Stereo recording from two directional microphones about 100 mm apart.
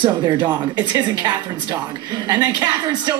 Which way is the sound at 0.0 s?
45° right (ahead or behind).